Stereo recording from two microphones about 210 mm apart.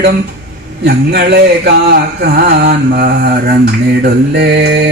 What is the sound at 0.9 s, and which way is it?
Mantra, 50° right (ahead or behind).